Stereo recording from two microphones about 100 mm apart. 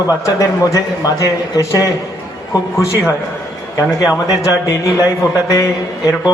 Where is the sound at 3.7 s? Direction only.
35° left (ahead or behind).